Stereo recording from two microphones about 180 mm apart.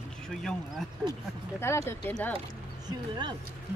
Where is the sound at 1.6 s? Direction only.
15° left (ahead or behind).